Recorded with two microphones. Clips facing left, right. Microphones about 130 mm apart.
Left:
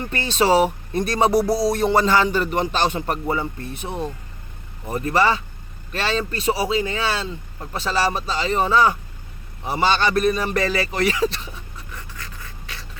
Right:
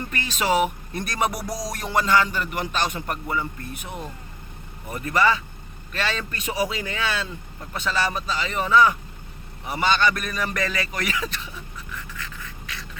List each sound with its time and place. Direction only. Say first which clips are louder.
0.1 s speech: left 6 dB; 30° left (ahead or behind)
11.9 s writing: right 1 dB; 35° left (ahead or behind)